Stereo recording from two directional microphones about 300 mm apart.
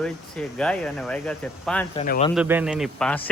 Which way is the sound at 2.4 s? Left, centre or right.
Centre.